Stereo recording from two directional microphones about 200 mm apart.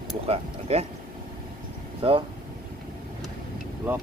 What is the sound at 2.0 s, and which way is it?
Speech, 25° right (ahead or behind).